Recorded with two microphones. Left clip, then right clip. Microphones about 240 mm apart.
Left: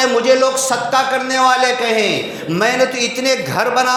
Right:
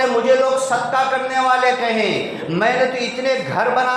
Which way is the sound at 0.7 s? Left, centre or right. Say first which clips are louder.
Left 2 dB; left.